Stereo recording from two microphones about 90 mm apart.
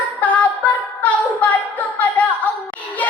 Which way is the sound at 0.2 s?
15° left (ahead or behind).